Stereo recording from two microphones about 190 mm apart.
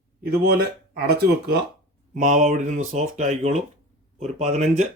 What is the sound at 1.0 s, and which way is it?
Speech, 55° right (ahead or behind).